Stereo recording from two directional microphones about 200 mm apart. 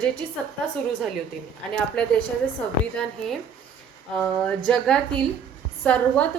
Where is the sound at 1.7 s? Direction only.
5° left (ahead or behind).